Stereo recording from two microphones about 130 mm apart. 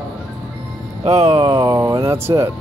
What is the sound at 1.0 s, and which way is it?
Speech, 50° right (ahead or behind).